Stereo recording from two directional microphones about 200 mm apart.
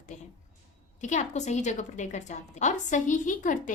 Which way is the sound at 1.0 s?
35° left (ahead or behind).